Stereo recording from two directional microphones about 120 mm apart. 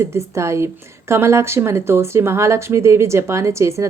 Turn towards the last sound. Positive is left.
turn(degrees=-25)  # may be behind; listen again after turning